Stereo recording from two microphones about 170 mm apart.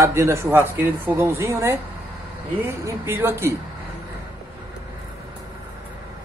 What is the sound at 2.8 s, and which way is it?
Speech, 15° right (ahead or behind).